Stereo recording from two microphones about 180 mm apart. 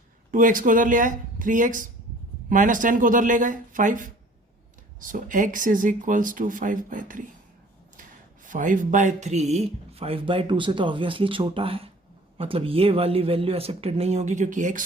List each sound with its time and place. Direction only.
0.3 s speech: 50° right (ahead or behind)
8.4 s speech: 45° right (ahead or behind)